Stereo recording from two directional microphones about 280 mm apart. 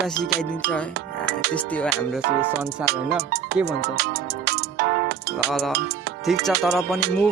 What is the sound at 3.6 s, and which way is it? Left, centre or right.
Music, right.